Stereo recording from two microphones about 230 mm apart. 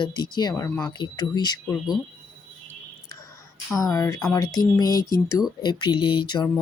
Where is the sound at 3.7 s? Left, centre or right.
Centre.